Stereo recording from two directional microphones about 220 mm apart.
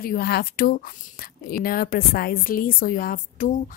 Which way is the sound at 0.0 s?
45° left (ahead or behind).